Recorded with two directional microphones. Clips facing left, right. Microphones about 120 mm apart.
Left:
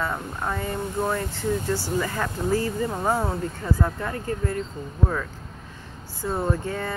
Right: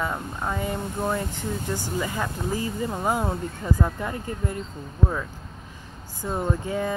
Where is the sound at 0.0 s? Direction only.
10° right (ahead or behind).